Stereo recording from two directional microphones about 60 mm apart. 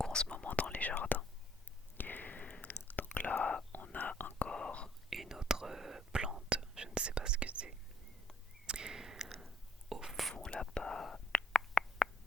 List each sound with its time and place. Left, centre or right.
0.0 s whispering: centre
2.0 s a sound: left
2.8 s whispering: left
4.4 s whispering: centre
5.0 s whispering: centre
5.4 s whispering: centre
8.6 s a sound: centre
9.9 s whispering: centre
10.3 s whispering: centre
11.3 s a sound: left